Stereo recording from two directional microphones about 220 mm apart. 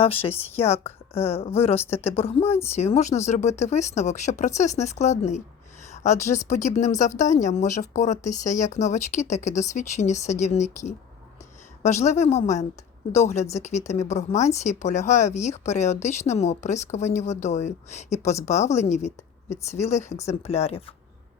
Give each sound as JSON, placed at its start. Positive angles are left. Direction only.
{"t": 0.0, "sound": "a woman's voice", "side_deg": 25}
{"t": 18.2, "sound": "a woman's voice", "side_deg": 15}
{"t": 18.4, "sound": "speech", "side_deg": 30}